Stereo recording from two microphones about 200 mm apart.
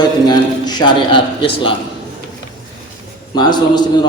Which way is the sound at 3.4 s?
20° left (ahead or behind).